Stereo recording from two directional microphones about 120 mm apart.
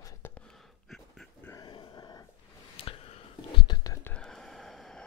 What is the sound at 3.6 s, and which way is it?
Whispering, 30° left (ahead or behind).